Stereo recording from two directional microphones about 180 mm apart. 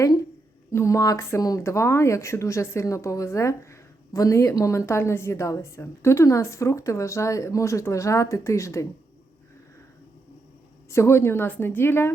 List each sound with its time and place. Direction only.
0.7 s speech: 15° left (ahead or behind)
10.8 s speech: 15° left (ahead or behind)